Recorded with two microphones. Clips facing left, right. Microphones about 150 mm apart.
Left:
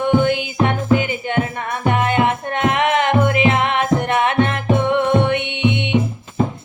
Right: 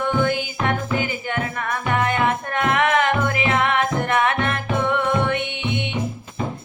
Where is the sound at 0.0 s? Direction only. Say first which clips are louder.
Left 5 dB; 20° left (ahead or behind).